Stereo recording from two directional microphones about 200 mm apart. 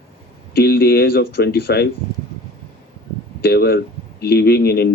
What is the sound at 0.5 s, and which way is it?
Speech, 50° left (ahead or behind).